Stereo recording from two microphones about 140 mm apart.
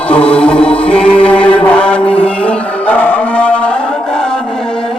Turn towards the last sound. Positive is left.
turn(degrees=5)  # may be behind; listen again after turning